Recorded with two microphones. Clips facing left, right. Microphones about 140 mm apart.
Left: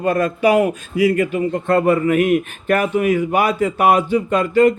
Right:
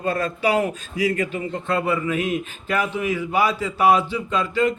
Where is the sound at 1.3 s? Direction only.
50° left (ahead or behind).